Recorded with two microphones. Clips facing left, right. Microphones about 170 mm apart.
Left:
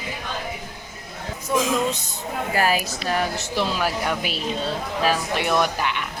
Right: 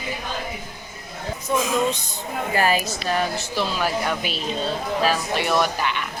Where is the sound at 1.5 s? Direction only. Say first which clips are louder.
Left 1 dB; 5° left (ahead or behind).